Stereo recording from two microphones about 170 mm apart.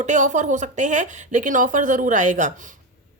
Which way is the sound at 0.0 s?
45° right (ahead or behind).